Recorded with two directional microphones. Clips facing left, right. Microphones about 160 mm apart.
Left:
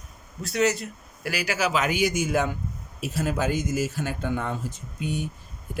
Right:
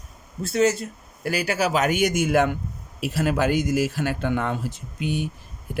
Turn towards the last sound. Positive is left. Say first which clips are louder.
# right 3 dB
turn(degrees=-80)